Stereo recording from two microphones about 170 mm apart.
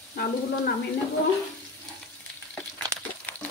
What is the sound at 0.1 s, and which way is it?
Speech, 65° left (ahead or behind).